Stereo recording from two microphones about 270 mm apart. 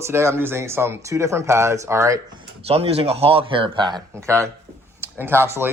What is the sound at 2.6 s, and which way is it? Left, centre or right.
Speech, right.